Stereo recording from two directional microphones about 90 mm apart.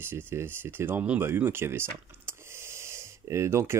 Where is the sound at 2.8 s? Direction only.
30° right (ahead or behind).